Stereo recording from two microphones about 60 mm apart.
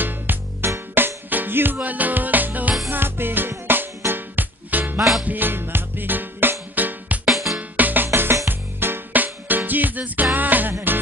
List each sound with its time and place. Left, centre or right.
0.0 s music: right
7.2 s music: centre
7.5 s music: right